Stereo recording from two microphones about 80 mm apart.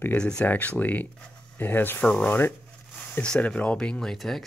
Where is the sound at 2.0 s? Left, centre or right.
Centre.